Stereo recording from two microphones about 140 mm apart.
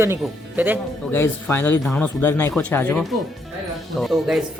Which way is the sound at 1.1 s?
15° left (ahead or behind).